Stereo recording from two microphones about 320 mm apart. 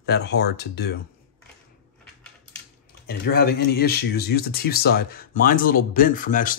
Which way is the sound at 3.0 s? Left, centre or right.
Left.